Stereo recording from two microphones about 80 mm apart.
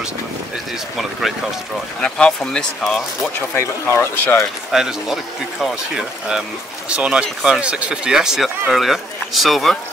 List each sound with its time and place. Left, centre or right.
2.0 s speech: centre
3.3 s speech: left
4.7 s speech: centre
6.9 s speech: centre